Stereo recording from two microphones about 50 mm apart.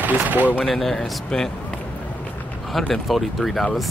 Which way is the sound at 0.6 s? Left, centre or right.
Centre.